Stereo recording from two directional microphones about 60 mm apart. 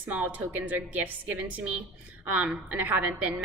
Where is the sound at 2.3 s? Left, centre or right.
Right.